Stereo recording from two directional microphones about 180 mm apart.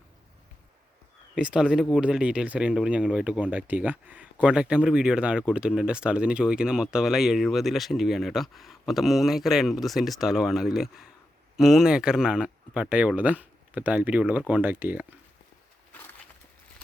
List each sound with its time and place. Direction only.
1.4 s speech: 5° right (ahead or behind)